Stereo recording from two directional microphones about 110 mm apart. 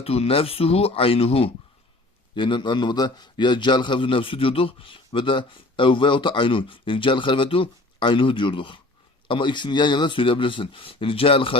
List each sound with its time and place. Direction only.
0.0 s speech: 65° left (ahead or behind)
2.3 s a man's voice: 45° left (ahead or behind)